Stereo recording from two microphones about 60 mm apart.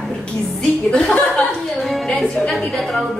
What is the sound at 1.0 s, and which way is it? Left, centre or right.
A woman's voice, centre.